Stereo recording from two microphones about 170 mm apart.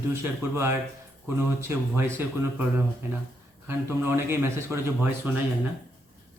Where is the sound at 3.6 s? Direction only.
15° right (ahead or behind).